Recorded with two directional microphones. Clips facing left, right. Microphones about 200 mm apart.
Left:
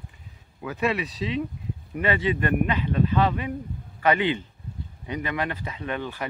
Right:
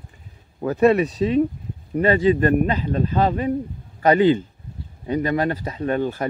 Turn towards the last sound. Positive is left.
turn(degrees=-45)  # may be behind; listen again after turning